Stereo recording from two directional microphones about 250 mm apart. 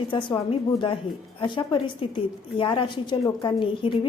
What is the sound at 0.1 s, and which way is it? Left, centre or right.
A woman's voice, centre.